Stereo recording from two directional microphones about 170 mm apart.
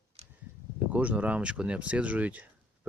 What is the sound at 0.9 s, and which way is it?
Speech, 10° right (ahead or behind).